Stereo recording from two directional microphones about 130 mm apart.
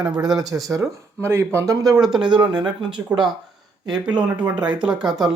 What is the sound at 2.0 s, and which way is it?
Speech, centre (ahead or behind).